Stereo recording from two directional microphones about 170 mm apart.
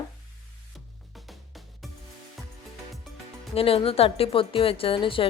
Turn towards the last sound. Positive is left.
turn(degrees=30)  # may be behind; listen again after turning